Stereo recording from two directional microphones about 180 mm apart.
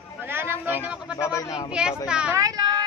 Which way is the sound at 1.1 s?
15° left (ahead or behind).